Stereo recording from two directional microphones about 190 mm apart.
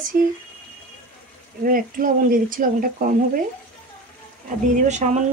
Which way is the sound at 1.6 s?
45° right (ahead or behind).